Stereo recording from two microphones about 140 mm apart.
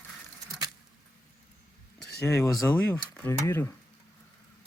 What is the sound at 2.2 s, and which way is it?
Speech, 20° left (ahead or behind).